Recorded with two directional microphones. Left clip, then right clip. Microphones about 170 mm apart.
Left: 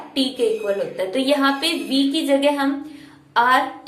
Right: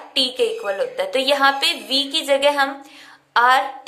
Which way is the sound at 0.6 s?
40° right (ahead or behind).